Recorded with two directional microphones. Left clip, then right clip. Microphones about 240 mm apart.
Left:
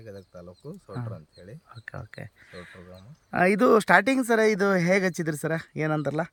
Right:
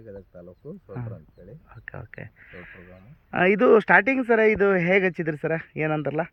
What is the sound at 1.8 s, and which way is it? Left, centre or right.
Speech, centre.